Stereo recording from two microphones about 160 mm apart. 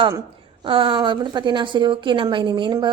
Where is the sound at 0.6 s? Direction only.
30° right (ahead or behind).